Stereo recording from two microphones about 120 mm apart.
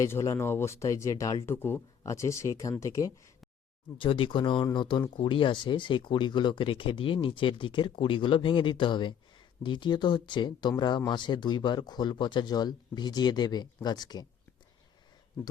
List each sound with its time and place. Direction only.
0.0 s speech: 25° left (ahead or behind)
3.9 s speech: 45° left (ahead or behind)